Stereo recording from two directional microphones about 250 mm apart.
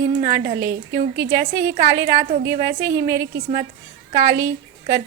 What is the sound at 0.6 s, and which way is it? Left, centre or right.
A woman's voice, centre.